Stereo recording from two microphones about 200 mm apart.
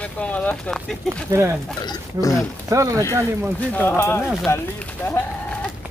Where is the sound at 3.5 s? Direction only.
10° left (ahead or behind).